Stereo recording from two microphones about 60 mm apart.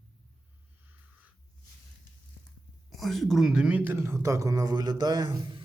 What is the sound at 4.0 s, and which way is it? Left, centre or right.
Speech, right.